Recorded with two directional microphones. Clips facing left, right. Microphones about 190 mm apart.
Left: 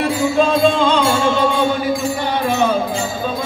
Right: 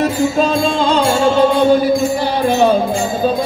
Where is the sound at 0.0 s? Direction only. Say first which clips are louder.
Right 1 dB; 45° right (ahead or behind).